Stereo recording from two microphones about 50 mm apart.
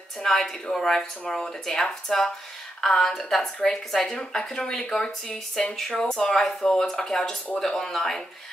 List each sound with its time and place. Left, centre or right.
0.2 s speech: centre